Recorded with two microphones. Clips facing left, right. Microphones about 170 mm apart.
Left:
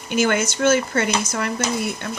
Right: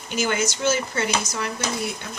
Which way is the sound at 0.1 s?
55° left (ahead or behind).